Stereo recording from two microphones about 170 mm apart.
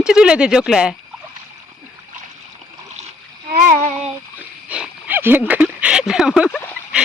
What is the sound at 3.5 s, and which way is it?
Child singing, 45° right (ahead or behind).